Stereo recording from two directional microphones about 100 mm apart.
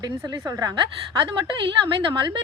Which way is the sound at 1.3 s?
55° right (ahead or behind).